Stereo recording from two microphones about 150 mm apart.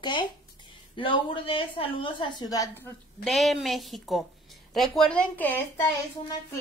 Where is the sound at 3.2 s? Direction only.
Centre (ahead or behind).